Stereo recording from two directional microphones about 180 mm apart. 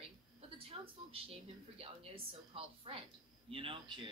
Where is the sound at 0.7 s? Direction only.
35° right (ahead or behind).